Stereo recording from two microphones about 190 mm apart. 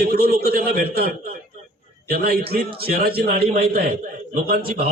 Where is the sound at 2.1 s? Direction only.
55° right (ahead or behind).